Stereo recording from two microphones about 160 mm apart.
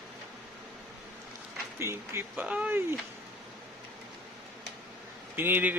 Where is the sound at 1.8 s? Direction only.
15° right (ahead or behind).